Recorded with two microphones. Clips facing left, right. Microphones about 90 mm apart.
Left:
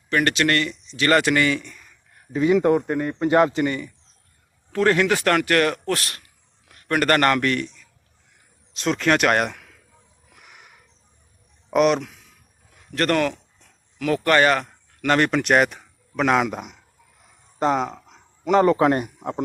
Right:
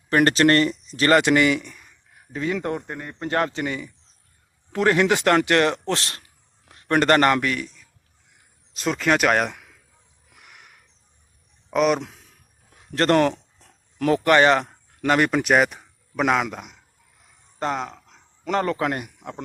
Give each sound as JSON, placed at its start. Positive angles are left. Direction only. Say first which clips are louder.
{"t": 0.1, "sound": "speech", "louder": "right 3 dB", "side_deg": -35}
{"t": 1.1, "sound": "a sound", "louder": "right 2 dB", "side_deg": -20}
{"t": 2.4, "sound": "speech", "louder": "left 8 dB", "side_deg": 15}
{"t": 3.6, "sound": "a man's voice", "louder": "left 4 dB", "side_deg": -5}
{"t": 4.7, "sound": "a man's voice", "louder": "even", "side_deg": -20}
{"t": 7.4, "sound": "a man's voice", "louder": "left 3 dB", "side_deg": -5}
{"t": 10.2, "sound": "a sound", "louder": "left 1 dB", "side_deg": 0}
{"t": 11.7, "sound": "speech", "louder": "left 2 dB", "side_deg": 0}
{"t": 12.7, "sound": "a sound", "louder": "right 3 dB", "side_deg": -30}
{"t": 14.1, "sound": "speech", "louder": "right 1 dB", "side_deg": -20}
{"t": 15.8, "sound": "a sound", "louder": "left 1 dB", "side_deg": -5}
{"t": 16.5, "sound": "a man's voice", "louder": "left 4 dB", "side_deg": 5}
{"t": 18.9, "sound": "a man's voice", "louder": "left 7 dB", "side_deg": 35}